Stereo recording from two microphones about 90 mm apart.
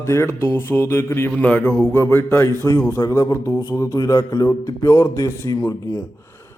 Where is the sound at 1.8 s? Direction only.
30° left (ahead or behind).